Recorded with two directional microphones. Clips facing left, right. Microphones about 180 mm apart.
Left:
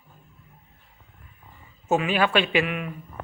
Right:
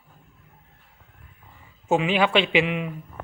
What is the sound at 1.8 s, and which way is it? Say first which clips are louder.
Speech: right 1 dB; 15° right (ahead or behind).